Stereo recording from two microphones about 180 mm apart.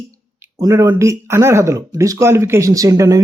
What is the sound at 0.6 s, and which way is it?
Speech, 20° right (ahead or behind).